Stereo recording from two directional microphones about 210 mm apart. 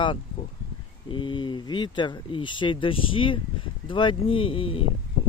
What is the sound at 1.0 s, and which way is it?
Speech, 25° left (ahead or behind).